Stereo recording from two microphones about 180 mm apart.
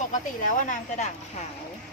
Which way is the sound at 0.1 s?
45° left (ahead or behind).